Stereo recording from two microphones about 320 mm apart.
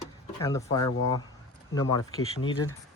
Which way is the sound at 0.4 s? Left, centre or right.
Centre.